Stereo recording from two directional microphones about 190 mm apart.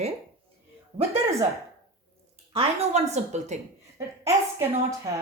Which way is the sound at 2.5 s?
30° right (ahead or behind).